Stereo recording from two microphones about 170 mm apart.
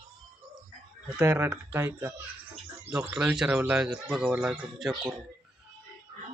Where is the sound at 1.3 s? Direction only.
15° right (ahead or behind).